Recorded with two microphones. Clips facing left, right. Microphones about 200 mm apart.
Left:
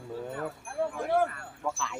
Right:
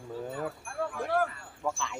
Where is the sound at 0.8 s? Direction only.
20° left (ahead or behind).